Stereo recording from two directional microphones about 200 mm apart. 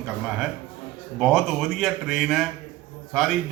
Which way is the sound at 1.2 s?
Centre (ahead or behind).